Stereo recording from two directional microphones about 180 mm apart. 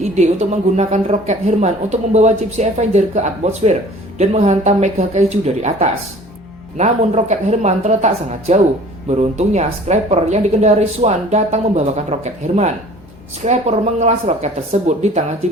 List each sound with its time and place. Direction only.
0.2 s a woman's voice: 40° right (ahead or behind)